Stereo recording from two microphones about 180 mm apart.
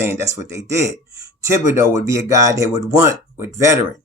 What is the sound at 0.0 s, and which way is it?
Speech, 15° right (ahead or behind).